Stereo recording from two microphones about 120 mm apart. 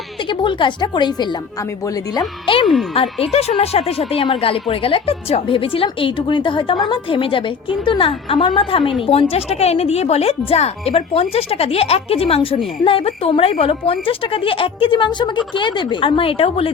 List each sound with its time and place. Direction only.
0.3 s a woman's voice: 40° left (ahead or behind)
2.9 s a woman's voice: 55° left (ahead or behind)